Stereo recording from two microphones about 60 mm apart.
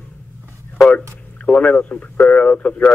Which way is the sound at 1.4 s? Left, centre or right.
Left.